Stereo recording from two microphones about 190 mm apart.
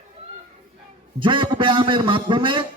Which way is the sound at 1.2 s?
25° right (ahead or behind).